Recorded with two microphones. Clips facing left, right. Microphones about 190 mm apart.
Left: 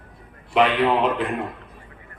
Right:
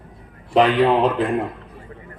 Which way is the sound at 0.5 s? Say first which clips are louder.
Right 3 dB; 40° right (ahead or behind).